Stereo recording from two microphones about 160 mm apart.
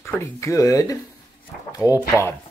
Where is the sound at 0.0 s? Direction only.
15° left (ahead or behind).